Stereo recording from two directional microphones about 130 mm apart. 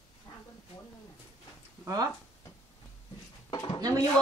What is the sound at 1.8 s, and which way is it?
Speech, 30° right (ahead or behind).